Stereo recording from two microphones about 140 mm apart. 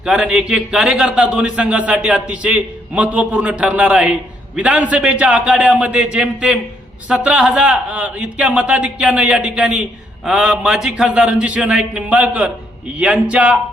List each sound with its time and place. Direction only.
0.0 s a man's voice: 5° right (ahead or behind)